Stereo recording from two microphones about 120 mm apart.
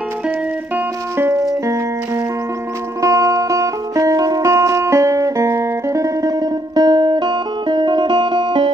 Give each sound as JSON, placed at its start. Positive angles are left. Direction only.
{"t": 1.1, "sound": "music", "side_deg": -20}
{"t": 3.0, "sound": "music", "side_deg": -25}